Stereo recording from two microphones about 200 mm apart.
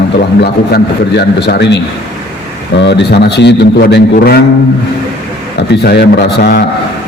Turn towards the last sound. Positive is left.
turn(degrees=55)  # may be behind; listen again after turning